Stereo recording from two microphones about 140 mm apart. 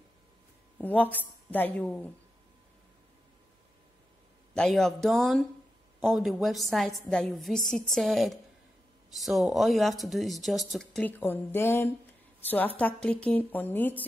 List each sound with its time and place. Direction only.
0.7 s a woman's voice: 10° left (ahead or behind)
4.6 s a woman's voice: 5° left (ahead or behind)